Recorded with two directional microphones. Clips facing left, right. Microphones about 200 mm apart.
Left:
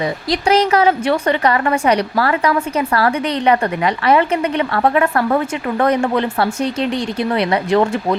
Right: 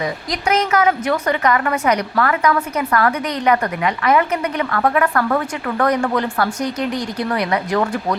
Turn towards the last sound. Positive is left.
turn(degrees=25)  # may be behind; listen again after turning